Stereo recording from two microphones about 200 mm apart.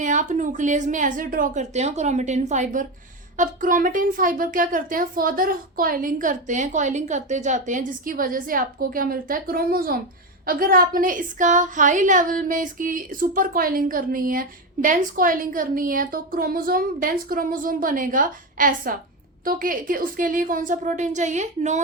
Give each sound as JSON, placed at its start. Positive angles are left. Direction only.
{"t": 0.0, "sound": "a woman's voice", "side_deg": -40}